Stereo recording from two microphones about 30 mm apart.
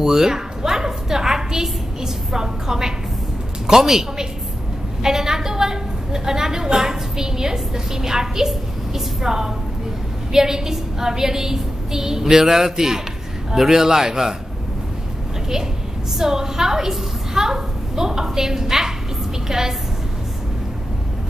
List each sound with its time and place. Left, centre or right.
0.0 s a sound: centre
3.6 s a woman's voice: centre
16.2 s a woman's voice: centre